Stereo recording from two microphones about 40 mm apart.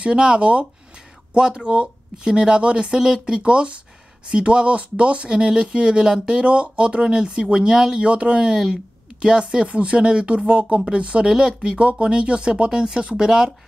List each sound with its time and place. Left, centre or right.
0.0 s speech: right